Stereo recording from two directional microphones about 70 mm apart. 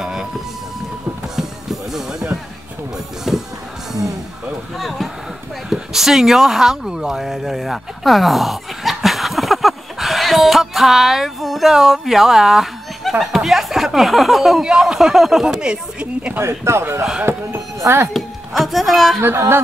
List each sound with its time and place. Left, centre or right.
0.0 s a sound: centre
1.3 s music: centre
3.3 s music: centre
4.7 s speech: centre
16.3 s speech: right
18.1 s speech: centre
19.2 s speech: right